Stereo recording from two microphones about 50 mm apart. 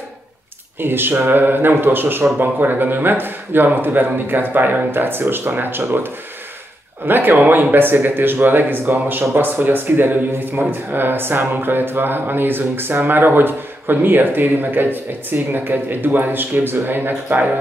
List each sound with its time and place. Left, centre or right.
0.7 s speech: right
7.1 s speech: right